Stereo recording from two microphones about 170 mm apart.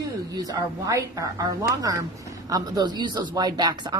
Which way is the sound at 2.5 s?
25° right (ahead or behind).